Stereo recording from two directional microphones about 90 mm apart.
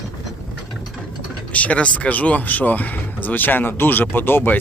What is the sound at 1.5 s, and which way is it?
Speech, 15° left (ahead or behind).